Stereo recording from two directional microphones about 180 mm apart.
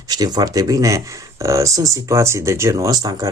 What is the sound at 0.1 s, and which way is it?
Speech, 20° right (ahead or behind).